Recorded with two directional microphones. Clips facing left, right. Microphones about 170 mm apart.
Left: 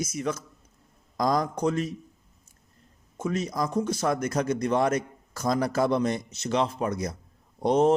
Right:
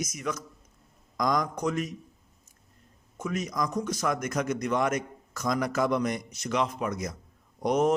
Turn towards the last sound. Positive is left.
turn(degrees=30)  # may be behind; listen again after turning